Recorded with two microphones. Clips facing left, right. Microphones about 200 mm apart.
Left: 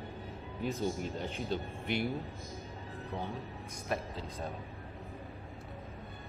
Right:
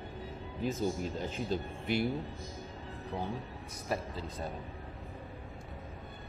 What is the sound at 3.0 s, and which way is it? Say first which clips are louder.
Speech: right 2 dB; 15° right (ahead or behind).